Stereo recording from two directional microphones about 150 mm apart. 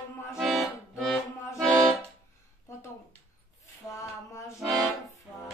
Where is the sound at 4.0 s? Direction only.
20° left (ahead or behind).